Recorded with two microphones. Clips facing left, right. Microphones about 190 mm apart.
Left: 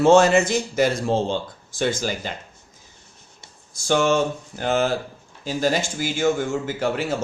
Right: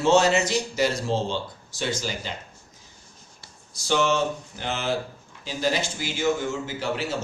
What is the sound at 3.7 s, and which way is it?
Speech, 50° left (ahead or behind).